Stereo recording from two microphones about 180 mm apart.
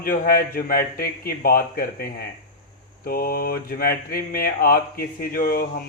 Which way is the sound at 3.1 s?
55° left (ahead or behind).